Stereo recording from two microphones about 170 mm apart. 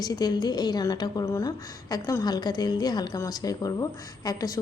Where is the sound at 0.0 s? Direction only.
25° left (ahead or behind).